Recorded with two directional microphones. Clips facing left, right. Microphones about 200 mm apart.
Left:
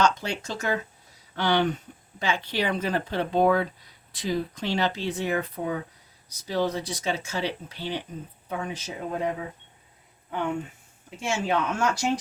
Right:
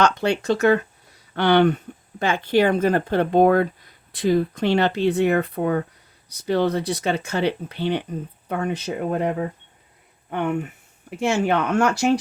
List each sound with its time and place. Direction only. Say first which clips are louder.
0.0 s speech: right 5 dB; 65° right (ahead or behind)